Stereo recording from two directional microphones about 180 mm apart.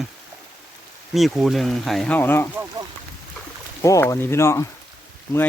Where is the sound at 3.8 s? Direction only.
15° left (ahead or behind).